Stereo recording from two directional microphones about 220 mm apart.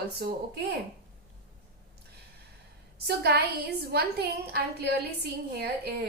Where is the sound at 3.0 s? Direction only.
45° right (ahead or behind).